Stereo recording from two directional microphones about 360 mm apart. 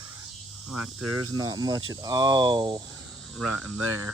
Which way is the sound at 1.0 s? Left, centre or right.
Right.